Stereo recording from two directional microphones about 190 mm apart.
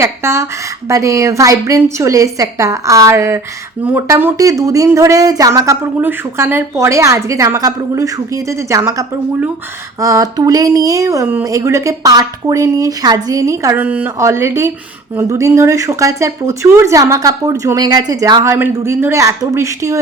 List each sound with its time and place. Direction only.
0.0 s speech: 15° right (ahead or behind)